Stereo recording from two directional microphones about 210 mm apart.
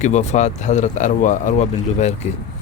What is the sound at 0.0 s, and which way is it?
A man's voice, 35° left (ahead or behind).